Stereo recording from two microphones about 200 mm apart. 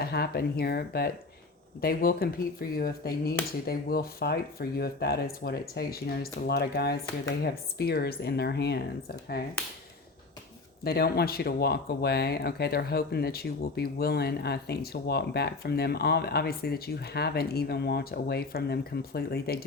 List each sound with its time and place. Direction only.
0.0 s speech: 50° left (ahead or behind)
10.8 s speech: 50° left (ahead or behind)